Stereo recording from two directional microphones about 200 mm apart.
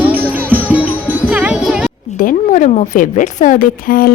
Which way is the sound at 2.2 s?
40° left (ahead or behind).